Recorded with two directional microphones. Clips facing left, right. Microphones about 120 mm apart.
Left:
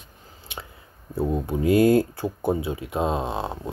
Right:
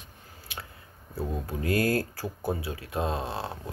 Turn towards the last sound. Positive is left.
turn(degrees=20)  # may be behind; listen again after turning